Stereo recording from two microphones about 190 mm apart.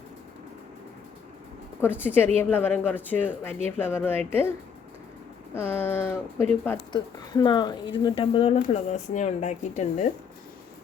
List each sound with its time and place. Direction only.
1.8 s a woman's voice: 10° left (ahead or behind)
5.5 s a woman's voice: 10° left (ahead or behind)
6.7 s speech: 25° left (ahead or behind)